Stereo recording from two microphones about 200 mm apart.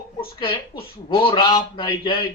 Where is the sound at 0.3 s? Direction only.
25° left (ahead or behind).